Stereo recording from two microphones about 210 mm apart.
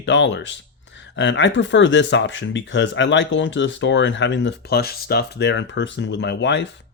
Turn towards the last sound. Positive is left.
turn(degrees=55)  # may be behind; listen again after turning